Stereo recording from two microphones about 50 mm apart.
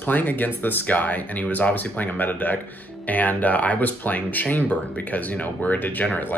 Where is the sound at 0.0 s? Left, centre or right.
Left.